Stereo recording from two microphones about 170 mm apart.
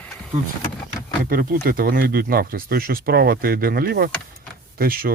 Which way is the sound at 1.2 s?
55° right (ahead or behind).